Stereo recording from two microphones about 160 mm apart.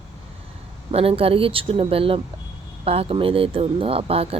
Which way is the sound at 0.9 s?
40° right (ahead or behind).